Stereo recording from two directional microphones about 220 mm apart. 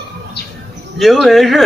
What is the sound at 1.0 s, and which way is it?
Speech, centre (ahead or behind).